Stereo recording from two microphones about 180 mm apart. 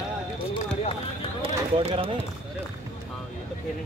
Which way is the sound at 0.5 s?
35° left (ahead or behind).